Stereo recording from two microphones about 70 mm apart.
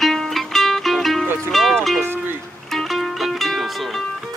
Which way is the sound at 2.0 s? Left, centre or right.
Right.